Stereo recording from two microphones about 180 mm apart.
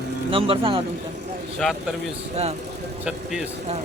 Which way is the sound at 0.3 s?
30° right (ahead or behind).